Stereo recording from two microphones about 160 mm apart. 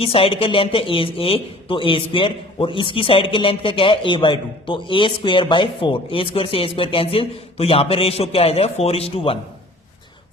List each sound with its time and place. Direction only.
0.0 s a man's voice: 35° left (ahead or behind)